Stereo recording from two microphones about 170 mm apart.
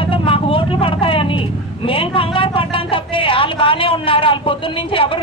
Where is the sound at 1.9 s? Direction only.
30° left (ahead or behind).